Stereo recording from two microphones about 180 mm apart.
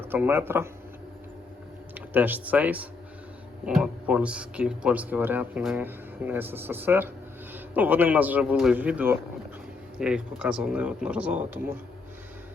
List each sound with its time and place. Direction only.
0.0 s speech: 10° right (ahead or behind)
2.0 s speech: 10° right (ahead or behind)